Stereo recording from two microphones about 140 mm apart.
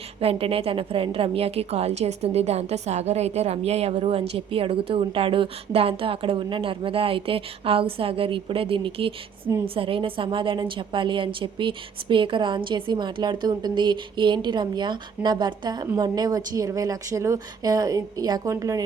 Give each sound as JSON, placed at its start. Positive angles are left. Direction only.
{"t": 0.2, "sound": "a woman's voice", "side_deg": -45}